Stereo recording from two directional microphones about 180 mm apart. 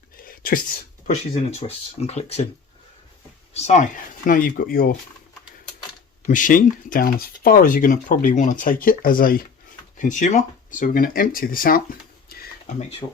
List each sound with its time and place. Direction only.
0.2 s speech: 50° left (ahead or behind); by 2.5 s 35° left (ahead or behind)
3.5 s speech: 35° left (ahead or behind); by 4.9 s 55° left (ahead or behind)
6.2 s speech: 45° left (ahead or behind)
12.3 s a sound: 55° left (ahead or behind)